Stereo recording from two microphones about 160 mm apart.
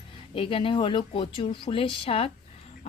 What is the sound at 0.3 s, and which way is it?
A woman's voice, 35° left (ahead or behind).